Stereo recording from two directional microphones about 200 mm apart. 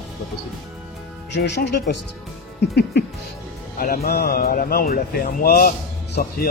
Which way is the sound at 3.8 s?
50° left (ahead or behind).